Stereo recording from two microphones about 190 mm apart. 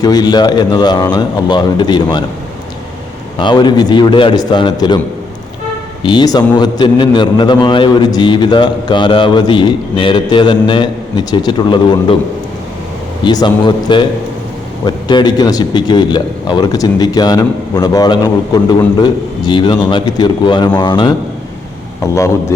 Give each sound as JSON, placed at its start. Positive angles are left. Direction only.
{"t": 0.0, "sound": "a man's voice", "side_deg": 20}
{"t": 3.3, "sound": "a man's voice", "side_deg": 25}
{"t": 6.0, "sound": "a man's voice", "side_deg": 25}
{"t": 13.2, "sound": "a man's voice", "side_deg": 25}